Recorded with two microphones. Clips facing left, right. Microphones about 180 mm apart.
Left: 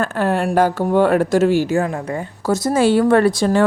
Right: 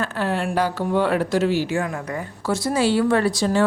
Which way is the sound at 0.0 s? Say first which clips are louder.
Left 5 dB; 50° left (ahead or behind).